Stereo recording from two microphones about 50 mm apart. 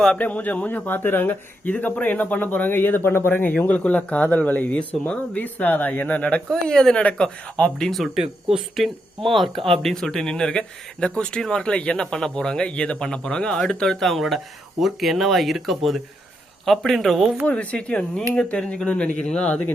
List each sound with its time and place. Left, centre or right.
0.2 s speech: left
3.7 s speech: left
6.7 s speech: centre
7.9 s speech: centre
17.4 s speech: left